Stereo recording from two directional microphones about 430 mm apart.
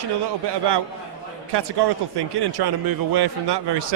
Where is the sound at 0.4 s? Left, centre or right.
Right.